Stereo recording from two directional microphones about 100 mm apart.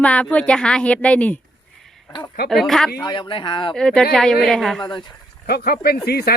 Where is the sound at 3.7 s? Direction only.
5° left (ahead or behind).